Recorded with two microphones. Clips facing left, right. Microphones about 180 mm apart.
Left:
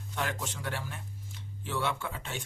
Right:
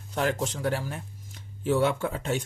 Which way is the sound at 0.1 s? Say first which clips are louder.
Right 8 dB; 40° right (ahead or behind).